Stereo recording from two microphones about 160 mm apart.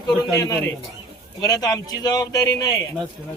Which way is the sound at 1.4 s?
25° left (ahead or behind).